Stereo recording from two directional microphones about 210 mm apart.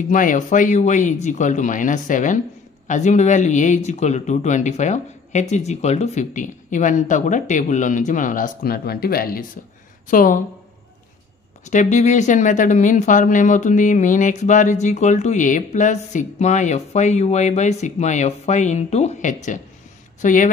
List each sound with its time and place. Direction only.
0.1 s speech: 40° left (ahead or behind)
11.6 s speech: 35° left (ahead or behind)